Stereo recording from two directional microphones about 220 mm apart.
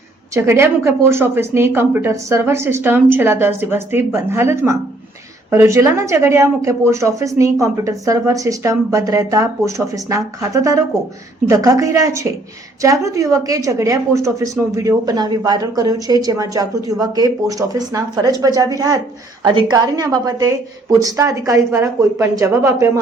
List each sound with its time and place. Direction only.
0.3 s a woman's voice: 10° right (ahead or behind)